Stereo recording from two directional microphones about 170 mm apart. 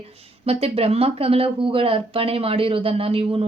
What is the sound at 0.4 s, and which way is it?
A woman's voice, 35° right (ahead or behind).